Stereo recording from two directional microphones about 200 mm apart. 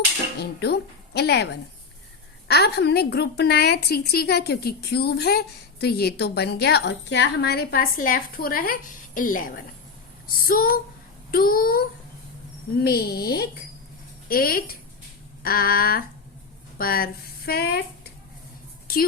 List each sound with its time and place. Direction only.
0.3 s a woman's voice: 55° left (ahead or behind)
12.8 s a woman's voice: 50° left (ahead or behind)
14.3 s a woman's voice: 45° left (ahead or behind)